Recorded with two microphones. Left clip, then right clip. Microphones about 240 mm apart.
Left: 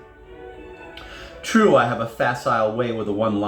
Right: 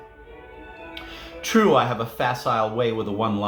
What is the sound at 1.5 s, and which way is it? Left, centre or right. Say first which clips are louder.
Speech: left 2 dB; right.